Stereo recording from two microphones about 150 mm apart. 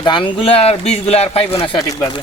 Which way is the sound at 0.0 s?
30° left (ahead or behind).